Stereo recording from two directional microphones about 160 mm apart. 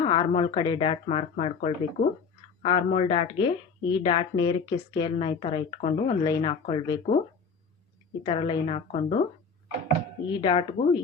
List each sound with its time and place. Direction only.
0.0 s speech: 35° left (ahead or behind)
8.2 s speech: 35° left (ahead or behind)
10.3 s speech: 35° left (ahead or behind)